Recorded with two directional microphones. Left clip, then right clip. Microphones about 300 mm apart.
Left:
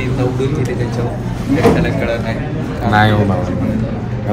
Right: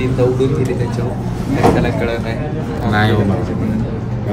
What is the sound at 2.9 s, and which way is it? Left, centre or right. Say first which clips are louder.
Speech: left 4 dB; centre.